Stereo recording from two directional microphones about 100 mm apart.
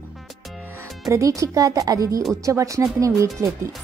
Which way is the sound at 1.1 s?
30° right (ahead or behind).